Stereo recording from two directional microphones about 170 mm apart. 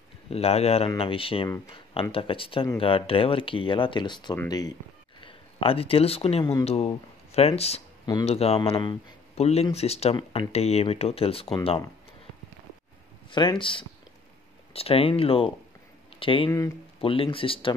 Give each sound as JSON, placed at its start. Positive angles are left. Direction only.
{"t": 0.3, "sound": "speech", "side_deg": 35}
{"t": 5.2, "sound": "speech", "side_deg": 35}
{"t": 13.3, "sound": "speech", "side_deg": 25}